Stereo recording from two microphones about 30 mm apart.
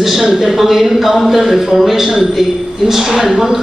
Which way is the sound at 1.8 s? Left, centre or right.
Centre.